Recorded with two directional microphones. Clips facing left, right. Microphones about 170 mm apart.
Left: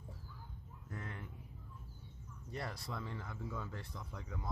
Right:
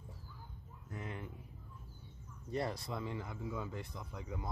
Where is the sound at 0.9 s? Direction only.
20° right (ahead or behind).